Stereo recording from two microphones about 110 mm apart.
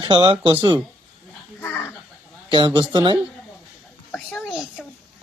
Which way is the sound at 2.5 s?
50° right (ahead or behind).